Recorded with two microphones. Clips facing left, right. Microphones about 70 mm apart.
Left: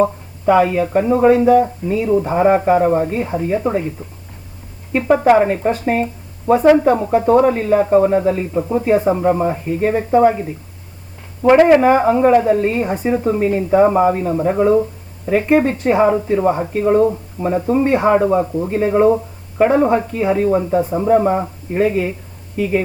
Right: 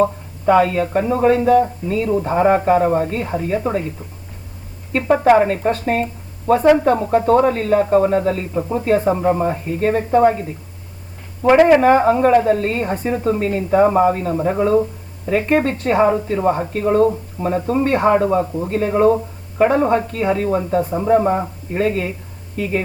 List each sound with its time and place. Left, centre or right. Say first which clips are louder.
0.0 s a woman's voice: left 1 dB; centre
4.9 s a woman's voice: left 1 dB; centre
11.8 s a woman's voice: even; centre